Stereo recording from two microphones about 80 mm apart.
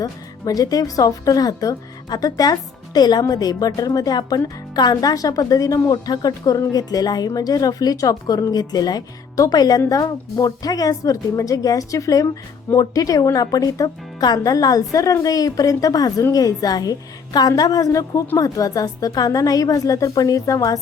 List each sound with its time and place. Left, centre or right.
0.0 s speech: left